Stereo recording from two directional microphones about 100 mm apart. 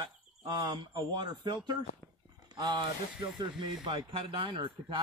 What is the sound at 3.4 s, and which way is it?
Speech, 55° right (ahead or behind).